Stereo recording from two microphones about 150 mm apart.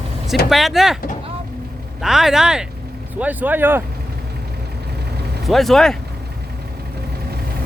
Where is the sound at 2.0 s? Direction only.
5° right (ahead or behind).